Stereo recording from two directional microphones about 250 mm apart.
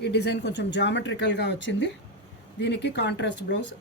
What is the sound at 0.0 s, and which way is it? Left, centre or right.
Speech, left.